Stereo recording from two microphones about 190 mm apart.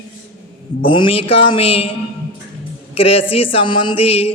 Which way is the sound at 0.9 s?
25° left (ahead or behind).